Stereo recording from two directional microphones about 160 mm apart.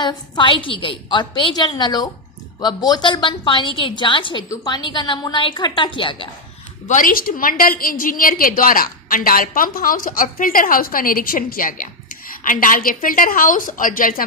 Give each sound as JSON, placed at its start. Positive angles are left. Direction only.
{"t": 0.0, "sound": "a woman's voice", "side_deg": 30}
{"t": 6.8, "sound": "a woman's voice", "side_deg": 55}